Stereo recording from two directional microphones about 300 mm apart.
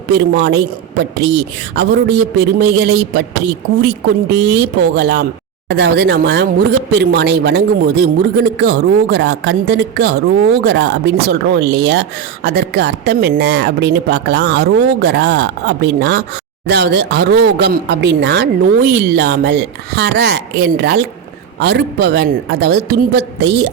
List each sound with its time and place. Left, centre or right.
0.1 s speech: right